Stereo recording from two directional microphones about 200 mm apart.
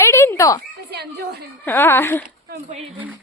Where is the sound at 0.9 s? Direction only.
55° right (ahead or behind).